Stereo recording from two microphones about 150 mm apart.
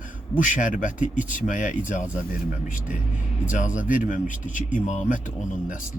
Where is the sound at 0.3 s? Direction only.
60° left (ahead or behind).